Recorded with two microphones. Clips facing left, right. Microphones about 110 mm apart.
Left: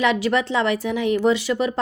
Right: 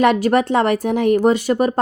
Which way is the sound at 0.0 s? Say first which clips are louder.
Right 5 dB; 50° right (ahead or behind).